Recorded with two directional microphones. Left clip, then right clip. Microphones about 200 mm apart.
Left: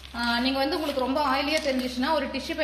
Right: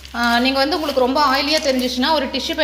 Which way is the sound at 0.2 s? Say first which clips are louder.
Right 9 dB; 25° right (ahead or behind).